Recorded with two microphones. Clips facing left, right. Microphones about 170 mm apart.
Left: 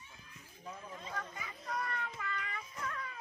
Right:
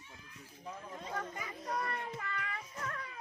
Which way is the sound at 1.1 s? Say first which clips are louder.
Right 5 dB; 35° right (ahead or behind).